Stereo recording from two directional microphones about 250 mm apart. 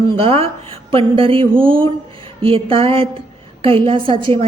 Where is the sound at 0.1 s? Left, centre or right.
Right.